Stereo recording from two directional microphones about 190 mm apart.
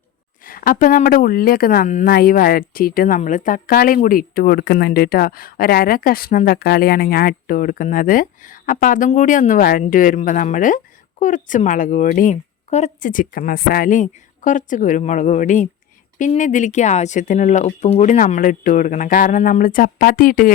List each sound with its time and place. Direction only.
0.4 s speech: 50° left (ahead or behind)